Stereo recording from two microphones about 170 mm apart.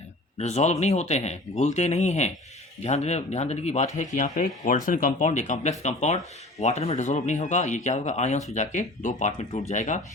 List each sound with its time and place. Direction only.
0.3 s speech: 40° left (ahead or behind)